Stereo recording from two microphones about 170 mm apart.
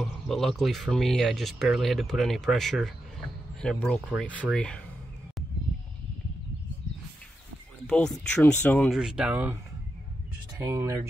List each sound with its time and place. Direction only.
0.0 s speech: centre (ahead or behind)
7.8 s speech: 5° left (ahead or behind)
10.6 s speech: 15° right (ahead or behind)